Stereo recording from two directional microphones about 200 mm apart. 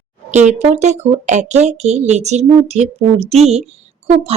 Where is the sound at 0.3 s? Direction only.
35° right (ahead or behind).